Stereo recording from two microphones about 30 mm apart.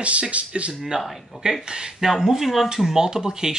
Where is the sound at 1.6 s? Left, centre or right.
Right.